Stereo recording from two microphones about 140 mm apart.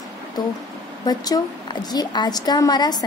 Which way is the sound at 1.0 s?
30° left (ahead or behind).